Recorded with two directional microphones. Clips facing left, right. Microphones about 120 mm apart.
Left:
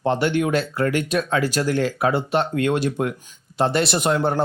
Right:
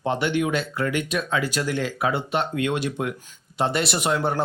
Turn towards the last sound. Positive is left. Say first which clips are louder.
# left 3 dB
turn(degrees=35)  # may be behind; listen again after turning